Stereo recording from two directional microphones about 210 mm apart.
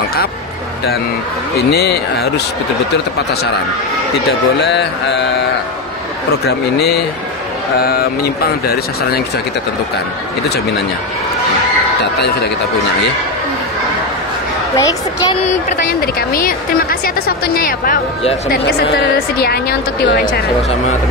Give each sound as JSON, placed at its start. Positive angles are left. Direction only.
{"t": 1.7, "sound": "a woman's voice", "side_deg": 50}
{"t": 4.3, "sound": "a woman's voice", "side_deg": 55}
{"t": 6.4, "sound": "a woman's voice", "side_deg": 50}
{"t": 12.0, "sound": "a woman's voice", "side_deg": 50}
{"t": 14.8, "sound": "a woman's voice", "side_deg": 15}
{"t": 15.4, "sound": "a woman's voice", "side_deg": 45}